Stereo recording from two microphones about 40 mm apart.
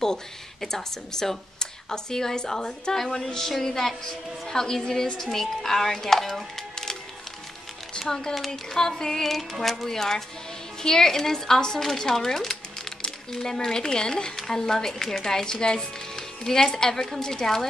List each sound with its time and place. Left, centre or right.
0.0 s speech: centre
6.7 s music: centre
8.0 s speech: centre